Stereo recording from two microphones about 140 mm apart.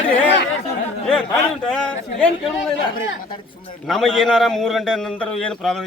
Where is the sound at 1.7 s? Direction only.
5° left (ahead or behind).